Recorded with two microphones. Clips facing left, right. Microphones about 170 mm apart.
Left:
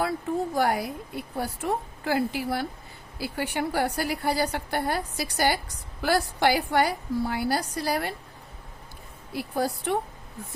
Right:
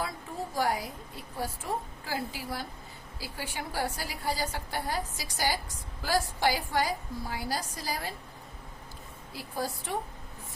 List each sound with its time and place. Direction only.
0.5 s a woman's voice: 65° left (ahead or behind)
9.3 s a woman's voice: 65° left (ahead or behind)